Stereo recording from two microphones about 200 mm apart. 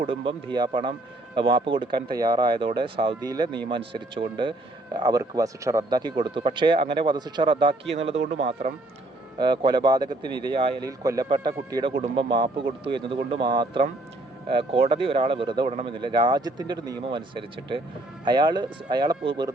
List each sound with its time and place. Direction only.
0.0 s speech: 25° right (ahead or behind)